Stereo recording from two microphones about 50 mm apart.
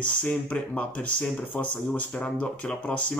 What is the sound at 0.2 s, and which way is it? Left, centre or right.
Speech, left.